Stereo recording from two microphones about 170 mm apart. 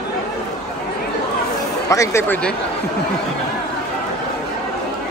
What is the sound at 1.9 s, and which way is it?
Speech, 15° left (ahead or behind).